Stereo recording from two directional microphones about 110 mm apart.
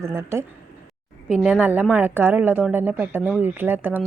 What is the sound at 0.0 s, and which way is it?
Speech, 25° right (ahead or behind).